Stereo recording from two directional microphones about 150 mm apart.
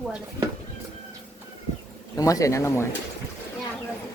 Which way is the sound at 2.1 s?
20° left (ahead or behind).